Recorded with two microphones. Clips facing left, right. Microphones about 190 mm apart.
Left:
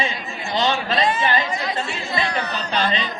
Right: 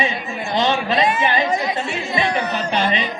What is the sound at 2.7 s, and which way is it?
Speech, 15° right (ahead or behind).